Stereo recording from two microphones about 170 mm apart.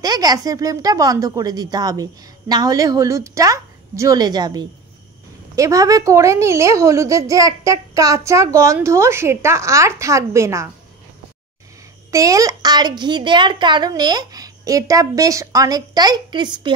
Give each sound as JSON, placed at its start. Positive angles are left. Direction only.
{"t": 0.0, "sound": "a child's voice", "side_deg": -20}
{"t": 12.1, "sound": "a child's voice", "side_deg": -20}